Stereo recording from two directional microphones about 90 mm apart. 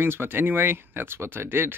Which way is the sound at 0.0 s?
25° right (ahead or behind).